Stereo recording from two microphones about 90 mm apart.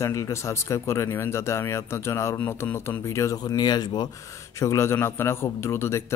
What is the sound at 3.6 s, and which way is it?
Speech, 50° left (ahead or behind).